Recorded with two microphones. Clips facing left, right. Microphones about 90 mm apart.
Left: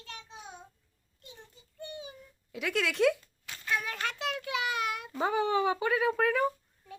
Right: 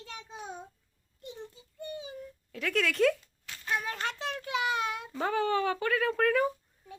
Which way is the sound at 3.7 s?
25° right (ahead or behind).